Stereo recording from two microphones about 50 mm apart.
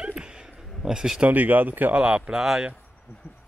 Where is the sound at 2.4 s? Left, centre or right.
Centre.